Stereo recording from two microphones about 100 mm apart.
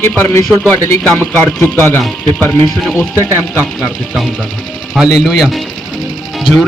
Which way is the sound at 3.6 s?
Centre (ahead or behind).